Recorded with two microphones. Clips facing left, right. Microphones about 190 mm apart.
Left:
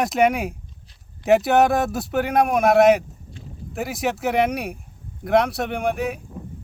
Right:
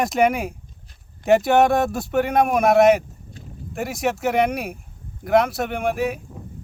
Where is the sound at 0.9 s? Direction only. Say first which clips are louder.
Right 2 dB; 50° right (ahead or behind).